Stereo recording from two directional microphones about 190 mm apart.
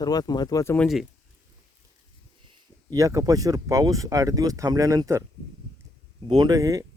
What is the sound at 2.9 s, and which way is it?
Speech, 15° right (ahead or behind).